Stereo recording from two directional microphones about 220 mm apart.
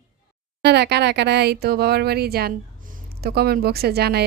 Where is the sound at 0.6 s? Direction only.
50° right (ahead or behind).